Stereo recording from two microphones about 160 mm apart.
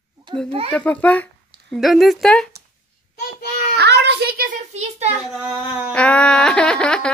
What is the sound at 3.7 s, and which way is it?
Speech, 90° right.